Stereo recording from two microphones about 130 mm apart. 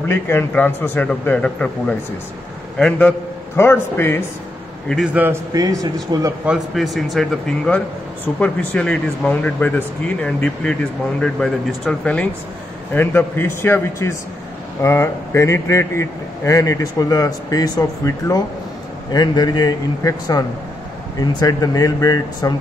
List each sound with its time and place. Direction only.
0.1 s a man's voice: 15° left (ahead or behind)
4.8 s a man's voice: centre (ahead or behind)
5.1 s a man's voice: 15° right (ahead or behind)
5.5 s speech: 25° right (ahead or behind)
6.4 s a man's voice: 5° right (ahead or behind); by 22.5 s 25° left (ahead or behind)